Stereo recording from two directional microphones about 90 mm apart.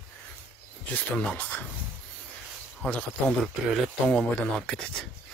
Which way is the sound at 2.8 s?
15° left (ahead or behind).